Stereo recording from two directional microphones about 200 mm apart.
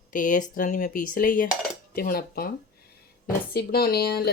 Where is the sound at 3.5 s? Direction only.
50° left (ahead or behind).